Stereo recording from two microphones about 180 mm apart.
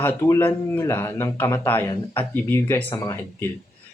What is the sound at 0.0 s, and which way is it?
Speech, 10° left (ahead or behind).